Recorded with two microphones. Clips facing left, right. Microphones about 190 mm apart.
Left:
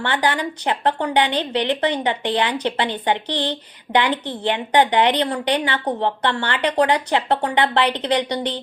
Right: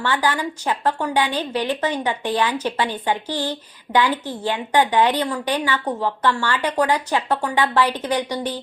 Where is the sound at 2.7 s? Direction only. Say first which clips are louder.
Left 1 dB; 20° left (ahead or behind).